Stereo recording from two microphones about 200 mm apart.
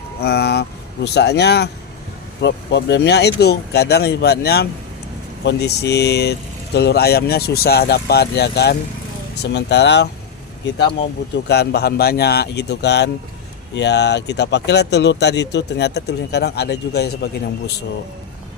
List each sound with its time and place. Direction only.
0.2 s speech: 55° left (ahead or behind)
11.4 s speech: 55° left (ahead or behind)